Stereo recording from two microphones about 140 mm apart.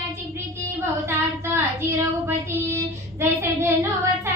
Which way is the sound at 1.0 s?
15° right (ahead or behind).